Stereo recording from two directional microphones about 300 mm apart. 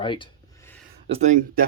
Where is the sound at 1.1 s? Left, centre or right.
Right.